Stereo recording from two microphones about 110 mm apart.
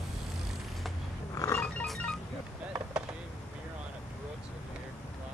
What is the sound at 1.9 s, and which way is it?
Music, 5° left (ahead or behind).